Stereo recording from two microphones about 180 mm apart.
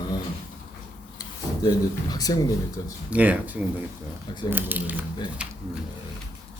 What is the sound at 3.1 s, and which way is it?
Speech, 10° right (ahead or behind).